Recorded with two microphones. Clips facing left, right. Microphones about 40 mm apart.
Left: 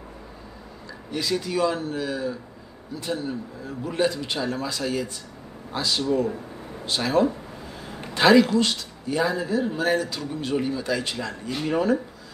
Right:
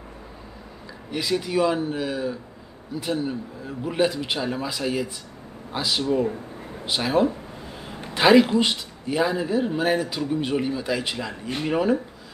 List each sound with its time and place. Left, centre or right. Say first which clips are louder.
1.1 s a man's voice: right 2 dB; centre